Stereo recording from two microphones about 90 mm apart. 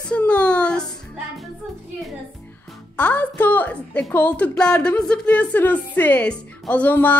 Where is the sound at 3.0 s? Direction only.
20° left (ahead or behind).